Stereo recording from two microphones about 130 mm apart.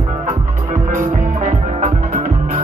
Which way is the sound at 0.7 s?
80° right.